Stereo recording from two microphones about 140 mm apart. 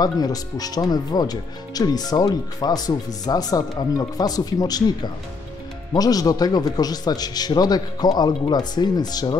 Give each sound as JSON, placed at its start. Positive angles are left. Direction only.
{"t": 0.0, "sound": "speech", "side_deg": 30}